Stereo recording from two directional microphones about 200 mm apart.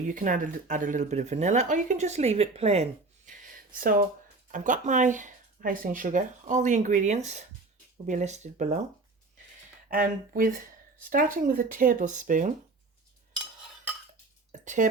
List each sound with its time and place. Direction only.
0.1 s speech: 40° right (ahead or behind)
9.9 s speech: 45° right (ahead or behind)
14.6 s a sound: 40° right (ahead or behind)